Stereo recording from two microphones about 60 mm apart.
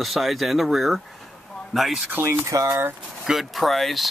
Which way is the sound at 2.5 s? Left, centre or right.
Right.